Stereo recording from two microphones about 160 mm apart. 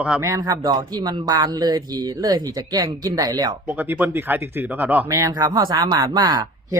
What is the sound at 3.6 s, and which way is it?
Speech, 10° right (ahead or behind).